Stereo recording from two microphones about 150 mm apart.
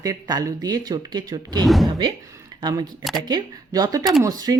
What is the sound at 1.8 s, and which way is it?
Speech, 25° right (ahead or behind).